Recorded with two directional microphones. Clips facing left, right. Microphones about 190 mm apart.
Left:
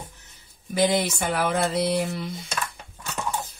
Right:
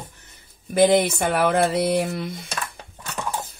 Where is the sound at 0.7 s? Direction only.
55° right (ahead or behind).